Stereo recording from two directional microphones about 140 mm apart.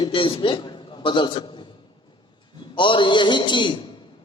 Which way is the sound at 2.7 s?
35° left (ahead or behind).